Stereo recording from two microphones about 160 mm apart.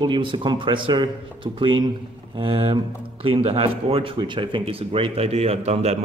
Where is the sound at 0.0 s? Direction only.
30° right (ahead or behind).